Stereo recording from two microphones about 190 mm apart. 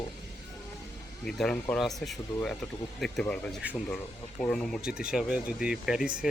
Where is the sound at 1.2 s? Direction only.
5° left (ahead or behind).